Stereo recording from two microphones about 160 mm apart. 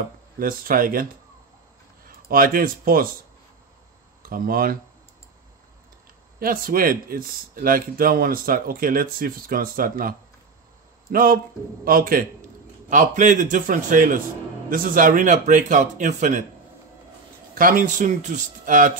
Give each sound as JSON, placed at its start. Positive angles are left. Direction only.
{"t": 0.4, "sound": "speech", "side_deg": -65}
{"t": 2.0, "sound": "speech", "side_deg": -65}
{"t": 4.2, "sound": "speech", "side_deg": -65}
{"t": 6.4, "sound": "a man's voice", "side_deg": -65}
{"t": 12.9, "sound": "a man's voice", "side_deg": -50}
{"t": 17.6, "sound": "a man's voice", "side_deg": -60}